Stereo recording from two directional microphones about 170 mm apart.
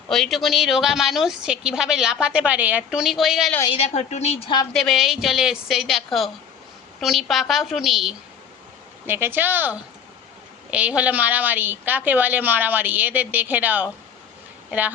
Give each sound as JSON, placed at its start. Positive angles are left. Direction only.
{"t": 0.1, "sound": "a woman's voice", "side_deg": 0}
{"t": 3.8, "sound": "a woman's voice", "side_deg": 40}
{"t": 4.7, "sound": "a woman's voice", "side_deg": 0}
{"t": 9.0, "sound": "a woman's voice", "side_deg": -15}